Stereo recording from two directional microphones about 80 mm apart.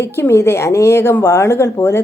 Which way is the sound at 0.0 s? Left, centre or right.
Left.